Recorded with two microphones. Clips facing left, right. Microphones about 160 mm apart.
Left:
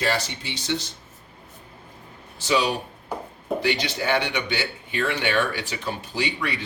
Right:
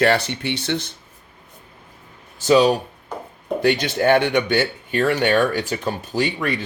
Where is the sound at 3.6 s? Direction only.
50° right (ahead or behind).